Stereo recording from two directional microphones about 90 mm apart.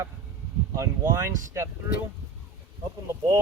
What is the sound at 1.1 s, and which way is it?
Speech, 35° right (ahead or behind).